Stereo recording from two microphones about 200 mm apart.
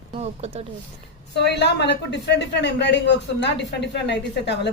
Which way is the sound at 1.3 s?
60° left (ahead or behind).